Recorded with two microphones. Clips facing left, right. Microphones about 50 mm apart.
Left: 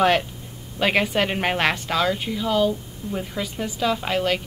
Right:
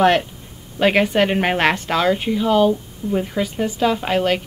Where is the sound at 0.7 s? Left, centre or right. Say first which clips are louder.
Right 5 dB; centre.